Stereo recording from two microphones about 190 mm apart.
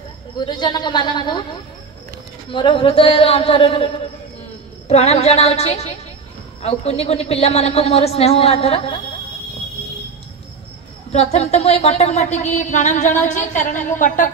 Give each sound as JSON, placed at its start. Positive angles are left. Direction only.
{"t": 0.4, "sound": "a man's voice", "side_deg": 25}
{"t": 2.5, "sound": "a man's voice", "side_deg": 25}
{"t": 11.1, "sound": "a woman's voice", "side_deg": 35}